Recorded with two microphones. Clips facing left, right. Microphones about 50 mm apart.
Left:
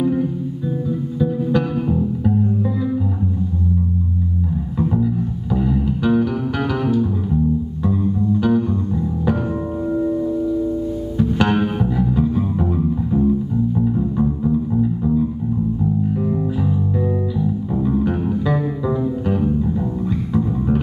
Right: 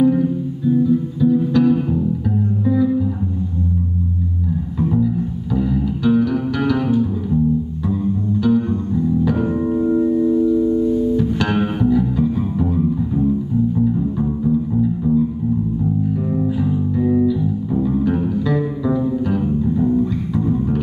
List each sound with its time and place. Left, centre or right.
0.0 s music: centre
4.7 s music: centre
8.4 s music: left
9.8 s music: centre
12.0 s music: centre
16.3 s music: centre
17.8 s music: centre